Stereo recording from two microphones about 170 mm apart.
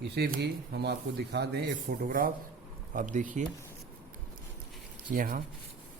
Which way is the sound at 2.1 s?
55° right (ahead or behind).